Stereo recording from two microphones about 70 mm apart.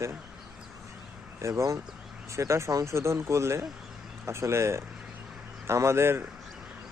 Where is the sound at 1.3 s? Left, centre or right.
Right.